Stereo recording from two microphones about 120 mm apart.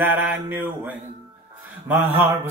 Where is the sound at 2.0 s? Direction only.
20° right (ahead or behind).